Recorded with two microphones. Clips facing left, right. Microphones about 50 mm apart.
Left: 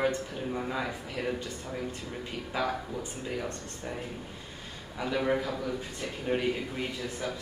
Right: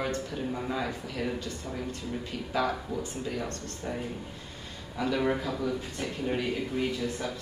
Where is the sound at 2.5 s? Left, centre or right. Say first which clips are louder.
Right 2 dB; centre.